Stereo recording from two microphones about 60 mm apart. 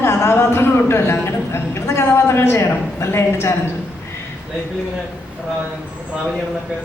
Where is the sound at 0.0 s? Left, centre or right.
Left.